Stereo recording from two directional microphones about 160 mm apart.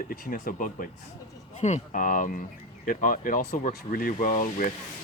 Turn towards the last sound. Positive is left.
turn(degrees=50)  # may be behind; listen again after turning